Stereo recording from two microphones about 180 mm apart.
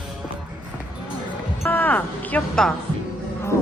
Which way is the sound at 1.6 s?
10° left (ahead or behind).